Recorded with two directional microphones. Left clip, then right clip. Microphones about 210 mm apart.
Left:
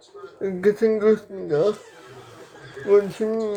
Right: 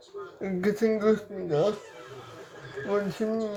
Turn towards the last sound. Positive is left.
turn(degrees=15)  # may be behind; listen again after turning